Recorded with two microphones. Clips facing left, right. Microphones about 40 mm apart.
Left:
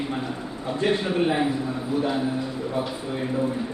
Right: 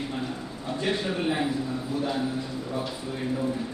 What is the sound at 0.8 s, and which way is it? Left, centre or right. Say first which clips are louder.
Speech: left 5 dB; left.